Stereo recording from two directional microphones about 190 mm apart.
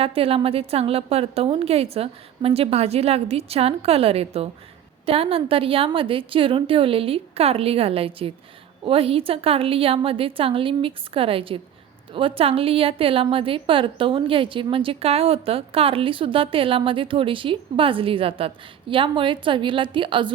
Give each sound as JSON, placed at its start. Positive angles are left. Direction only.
{"t": 0.0, "sound": "a woman's voice", "side_deg": -30}